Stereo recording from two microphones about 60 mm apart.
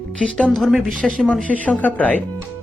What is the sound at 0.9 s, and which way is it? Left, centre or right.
Speech, centre.